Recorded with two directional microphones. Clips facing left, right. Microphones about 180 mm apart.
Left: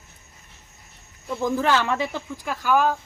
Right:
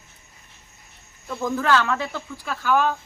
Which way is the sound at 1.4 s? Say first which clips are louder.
Even; 20° left (ahead or behind).